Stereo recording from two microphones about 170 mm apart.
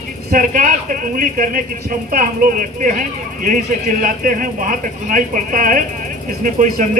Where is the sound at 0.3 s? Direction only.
50° right (ahead or behind).